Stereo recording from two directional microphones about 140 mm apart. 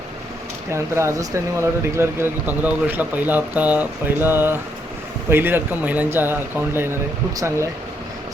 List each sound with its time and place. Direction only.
0.7 s speech: 20° right (ahead or behind)